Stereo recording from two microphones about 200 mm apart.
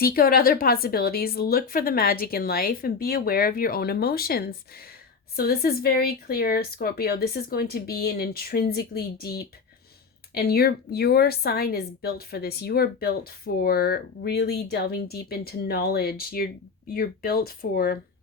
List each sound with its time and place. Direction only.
0.0 s a woman's voice: 50° left (ahead or behind)